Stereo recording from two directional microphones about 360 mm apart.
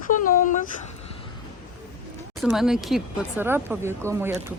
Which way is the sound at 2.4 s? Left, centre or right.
Centre.